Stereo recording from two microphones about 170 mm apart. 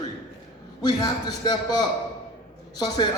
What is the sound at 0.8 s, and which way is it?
A man's voice, 25° left (ahead or behind).